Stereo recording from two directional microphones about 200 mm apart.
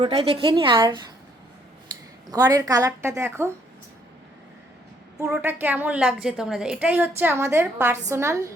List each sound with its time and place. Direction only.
0.0 s a woman's voice: 30° right (ahead or behind)
2.2 s a woman's voice: 20° right (ahead or behind)
5.3 s a woman's voice: 10° right (ahead or behind)